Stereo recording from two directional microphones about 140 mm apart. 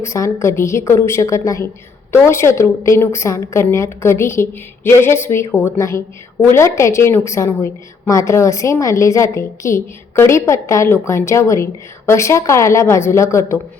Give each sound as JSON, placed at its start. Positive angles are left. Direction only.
{"t": 0.0, "sound": "a woman's voice", "side_deg": 20}